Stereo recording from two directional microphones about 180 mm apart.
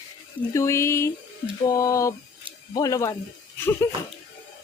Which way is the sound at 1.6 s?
20° left (ahead or behind).